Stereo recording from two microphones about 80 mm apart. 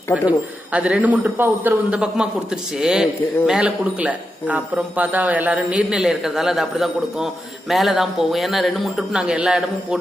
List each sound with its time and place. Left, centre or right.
0.3 s a man's voice: centre
2.0 s a man's voice: centre
5.5 s a man's voice: centre
9.2 s a man's voice: centre